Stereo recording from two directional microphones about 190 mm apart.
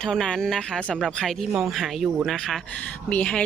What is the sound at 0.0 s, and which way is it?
Speech, 5° left (ahead or behind).